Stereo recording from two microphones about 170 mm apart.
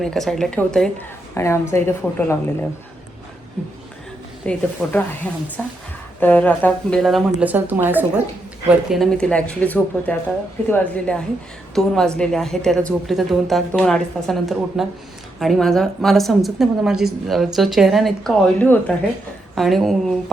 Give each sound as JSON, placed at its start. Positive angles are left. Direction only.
{"t": 0.0, "sound": "a woman's voice", "side_deg": 0}
{"t": 1.4, "sound": "speech", "side_deg": 15}
{"t": 4.4, "sound": "speech", "side_deg": 10}
{"t": 8.9, "sound": "a woman's voice", "side_deg": 0}